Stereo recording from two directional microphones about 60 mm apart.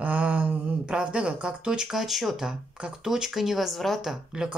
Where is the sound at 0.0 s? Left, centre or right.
Right.